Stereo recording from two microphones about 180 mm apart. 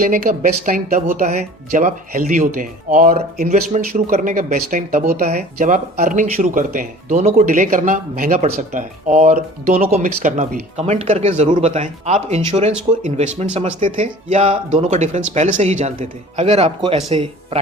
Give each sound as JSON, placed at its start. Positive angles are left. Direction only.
{"t": 0.0, "sound": "speech", "side_deg": -50}
{"t": 3.5, "sound": "speech", "side_deg": -45}